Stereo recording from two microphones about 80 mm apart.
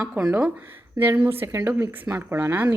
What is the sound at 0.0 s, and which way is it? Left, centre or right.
Speech, centre.